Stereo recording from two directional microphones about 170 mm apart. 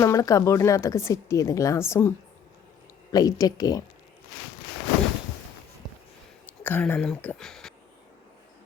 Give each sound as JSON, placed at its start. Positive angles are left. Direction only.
{"t": 0.0, "sound": "a woman's voice", "side_deg": 20}
{"t": 6.6, "sound": "speech", "side_deg": 10}